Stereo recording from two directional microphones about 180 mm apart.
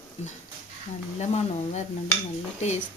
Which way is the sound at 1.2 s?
40° left (ahead or behind).